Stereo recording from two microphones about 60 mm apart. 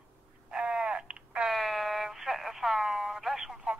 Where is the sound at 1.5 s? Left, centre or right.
Centre.